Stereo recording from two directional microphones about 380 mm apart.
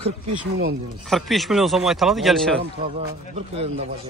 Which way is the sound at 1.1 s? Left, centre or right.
Centre.